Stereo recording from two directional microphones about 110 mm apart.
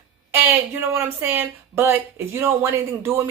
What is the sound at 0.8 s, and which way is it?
Speech, 25° right (ahead or behind).